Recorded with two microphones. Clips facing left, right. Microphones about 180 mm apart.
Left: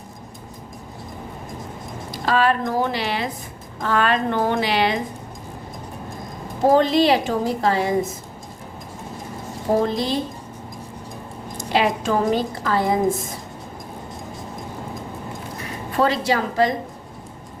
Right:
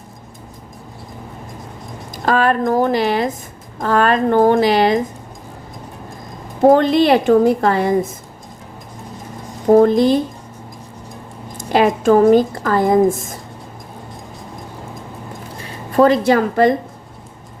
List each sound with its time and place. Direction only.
2.1 s a woman's voice: 45° right (ahead or behind)
6.7 s a woman's voice: 55° right (ahead or behind)
9.7 s a woman's voice: 50° right (ahead or behind)
11.5 s a woman's voice: 50° right (ahead or behind)
15.9 s a woman's voice: 50° right (ahead or behind)